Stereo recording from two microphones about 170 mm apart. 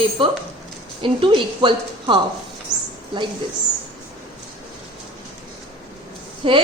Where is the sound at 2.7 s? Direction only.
15° left (ahead or behind).